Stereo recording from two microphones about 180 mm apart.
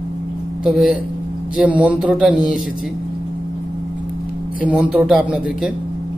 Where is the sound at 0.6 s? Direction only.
5° right (ahead or behind).